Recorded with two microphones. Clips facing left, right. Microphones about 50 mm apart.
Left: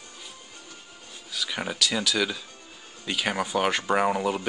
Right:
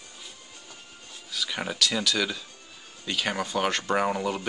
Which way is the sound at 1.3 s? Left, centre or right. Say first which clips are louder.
Even; centre.